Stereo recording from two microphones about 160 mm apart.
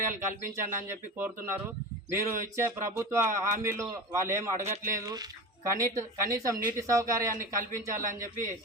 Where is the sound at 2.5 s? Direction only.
15° right (ahead or behind).